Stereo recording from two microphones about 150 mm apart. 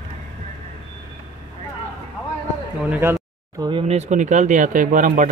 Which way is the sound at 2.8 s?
15° right (ahead or behind).